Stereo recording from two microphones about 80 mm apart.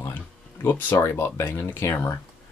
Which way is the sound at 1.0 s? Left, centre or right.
Left.